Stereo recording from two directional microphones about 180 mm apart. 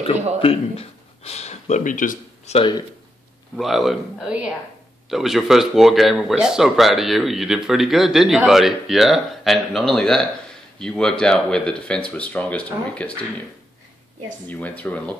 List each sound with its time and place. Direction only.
0.4 s speech: 35° left (ahead or behind)
3.5 s speech: centre (ahead or behind)
14.5 s speech: 10° left (ahead or behind)